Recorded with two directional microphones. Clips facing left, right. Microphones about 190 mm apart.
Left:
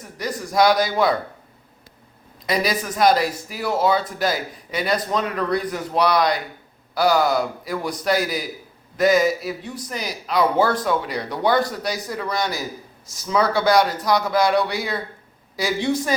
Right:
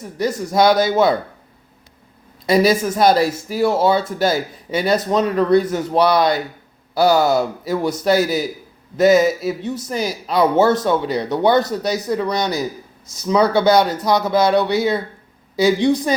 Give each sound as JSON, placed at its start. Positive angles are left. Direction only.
{"t": 0.2, "sound": "speech", "side_deg": -25}
{"t": 2.5, "sound": "speech", "side_deg": -30}